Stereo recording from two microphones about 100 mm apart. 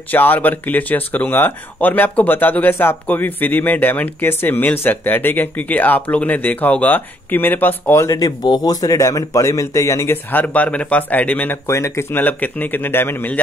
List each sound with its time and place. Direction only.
0.1 s speech: 15° left (ahead or behind)
8.5 s speech: 40° left (ahead or behind)
10.3 s speech: 15° left (ahead or behind)
11.6 s a man's voice: 30° left (ahead or behind)